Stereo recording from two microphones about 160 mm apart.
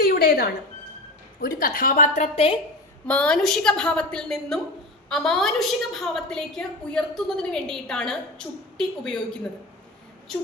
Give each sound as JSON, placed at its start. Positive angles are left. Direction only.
{"t": 0.0, "sound": "a sound", "side_deg": 75}
{"t": 1.4, "sound": "a woman's voice", "side_deg": 65}
{"t": 3.1, "sound": "a woman's voice", "side_deg": 5}